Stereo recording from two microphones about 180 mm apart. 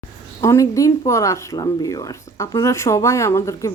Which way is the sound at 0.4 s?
15° left (ahead or behind).